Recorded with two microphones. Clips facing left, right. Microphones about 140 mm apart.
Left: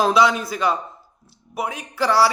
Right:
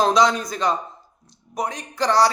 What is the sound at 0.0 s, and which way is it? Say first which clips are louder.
A man's voice: even; 5° left (ahead or behind).